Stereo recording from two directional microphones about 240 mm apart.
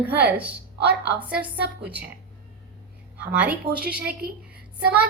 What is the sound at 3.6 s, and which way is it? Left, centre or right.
Speech, right.